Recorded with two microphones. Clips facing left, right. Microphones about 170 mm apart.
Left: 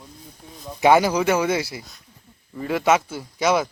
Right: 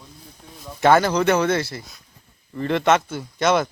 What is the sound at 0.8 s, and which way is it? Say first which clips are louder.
Speech: even; 10° left (ahead or behind).